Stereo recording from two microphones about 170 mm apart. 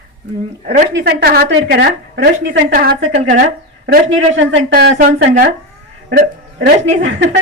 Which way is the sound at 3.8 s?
90° right.